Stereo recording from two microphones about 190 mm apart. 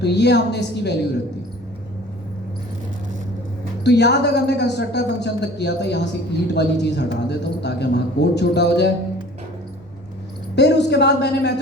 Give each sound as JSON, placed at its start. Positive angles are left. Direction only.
{"t": 0.0, "sound": "a man's voice", "side_deg": 60}
{"t": 3.8, "sound": "a man's voice", "side_deg": 60}
{"t": 10.5, "sound": "a man's voice", "side_deg": 65}